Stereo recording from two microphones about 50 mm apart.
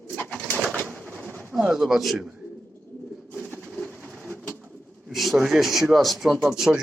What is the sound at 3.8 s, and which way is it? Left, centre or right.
Bird, right.